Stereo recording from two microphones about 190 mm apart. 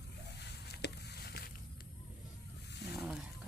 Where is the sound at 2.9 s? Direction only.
Centre (ahead or behind).